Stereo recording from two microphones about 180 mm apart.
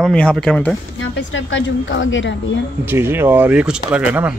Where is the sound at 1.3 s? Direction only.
90° left.